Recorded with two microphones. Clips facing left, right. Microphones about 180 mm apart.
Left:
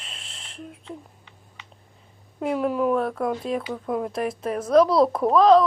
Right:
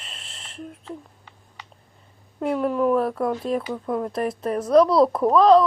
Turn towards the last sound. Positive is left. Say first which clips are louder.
# right 1 dB
turn(degrees=0)  # may be behind; listen again after turning